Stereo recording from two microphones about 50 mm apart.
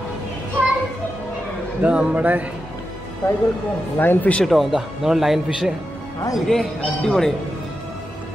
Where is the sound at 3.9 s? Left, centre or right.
Left.